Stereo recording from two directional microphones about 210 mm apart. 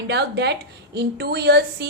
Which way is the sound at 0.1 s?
55° right (ahead or behind).